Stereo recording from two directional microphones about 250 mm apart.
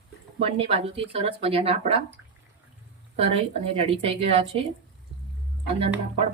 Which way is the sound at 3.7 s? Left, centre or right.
Right.